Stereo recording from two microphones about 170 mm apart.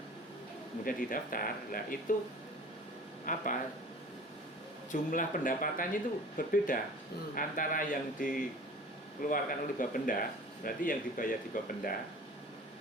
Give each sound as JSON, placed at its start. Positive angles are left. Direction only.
{"t": 0.9, "sound": "speech", "side_deg": 55}
{"t": 3.3, "sound": "speech", "side_deg": 50}
{"t": 4.9, "sound": "speech", "side_deg": 50}
{"t": 9.3, "sound": "speech", "side_deg": 55}